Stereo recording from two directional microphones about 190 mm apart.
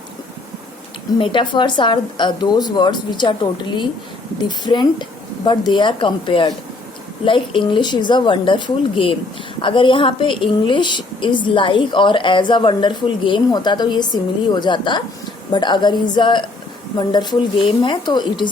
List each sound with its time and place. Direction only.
1.2 s a woman's voice: 25° left (ahead or behind)